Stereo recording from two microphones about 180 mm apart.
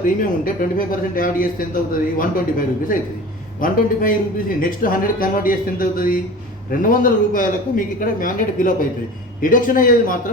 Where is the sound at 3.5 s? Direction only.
50° left (ahead or behind).